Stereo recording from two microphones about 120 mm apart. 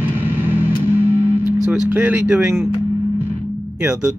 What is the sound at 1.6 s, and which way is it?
Speech, 10° right (ahead or behind).